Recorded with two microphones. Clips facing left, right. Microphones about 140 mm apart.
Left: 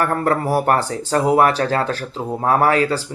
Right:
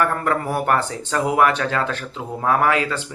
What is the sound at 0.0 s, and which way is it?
Speech, 40° left (ahead or behind).